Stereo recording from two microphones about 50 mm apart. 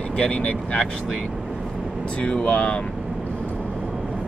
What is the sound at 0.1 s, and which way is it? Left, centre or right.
Speech, left.